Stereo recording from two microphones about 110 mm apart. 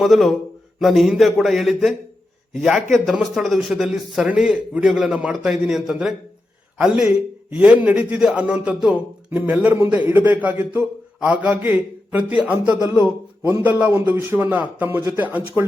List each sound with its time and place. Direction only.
0.0 s a man's voice: centre (ahead or behind); by 15.6 s 15° right (ahead or behind)